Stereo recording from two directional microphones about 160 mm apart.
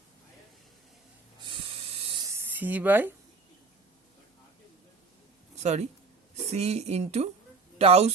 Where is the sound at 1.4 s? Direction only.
30° right (ahead or behind).